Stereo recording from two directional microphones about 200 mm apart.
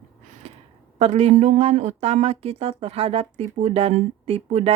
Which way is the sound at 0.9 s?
35° right (ahead or behind).